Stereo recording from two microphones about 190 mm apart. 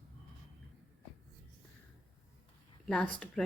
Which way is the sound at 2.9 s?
5° left (ahead or behind).